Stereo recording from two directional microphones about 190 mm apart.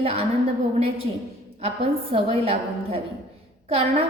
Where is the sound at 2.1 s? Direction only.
30° right (ahead or behind).